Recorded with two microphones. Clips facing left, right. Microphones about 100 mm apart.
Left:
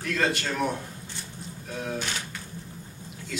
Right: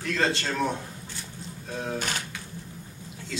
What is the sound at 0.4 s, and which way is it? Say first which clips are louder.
Speech: even; 15° left (ahead or behind).